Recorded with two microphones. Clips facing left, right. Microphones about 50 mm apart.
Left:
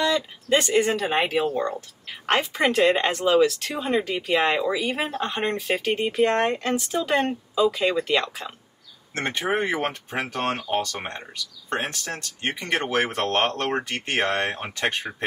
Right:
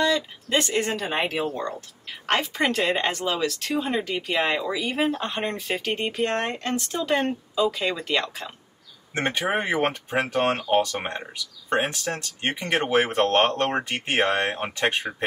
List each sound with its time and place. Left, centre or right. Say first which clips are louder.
0.0 s speech: even; centre
9.5 s speech: left 1 dB; centre